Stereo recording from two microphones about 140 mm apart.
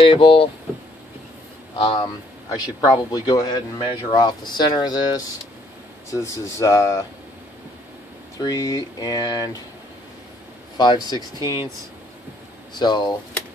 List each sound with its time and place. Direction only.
0.0 s speech: 40° left (ahead or behind)
1.8 s speech: 40° left (ahead or behind)
2.5 s speech: 30° left (ahead or behind)
8.4 s speech: 25° left (ahead or behind)
10.8 s speech: 30° left (ahead or behind)
12.7 s speech: 30° left (ahead or behind)